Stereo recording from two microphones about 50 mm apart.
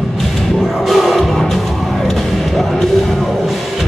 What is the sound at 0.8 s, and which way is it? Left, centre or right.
Music, centre.